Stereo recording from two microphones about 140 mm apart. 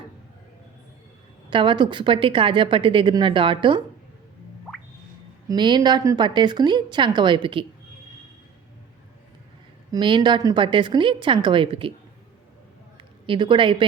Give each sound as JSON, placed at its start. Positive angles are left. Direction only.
{"t": 1.5, "sound": "a woman's voice", "side_deg": -35}
{"t": 5.5, "sound": "a woman's voice", "side_deg": -30}
{"t": 9.9, "sound": "a woman's voice", "side_deg": -30}
{"t": 13.2, "sound": "a woman's voice", "side_deg": -35}